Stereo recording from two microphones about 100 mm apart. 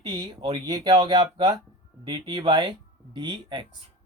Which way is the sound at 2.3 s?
55° right (ahead or behind).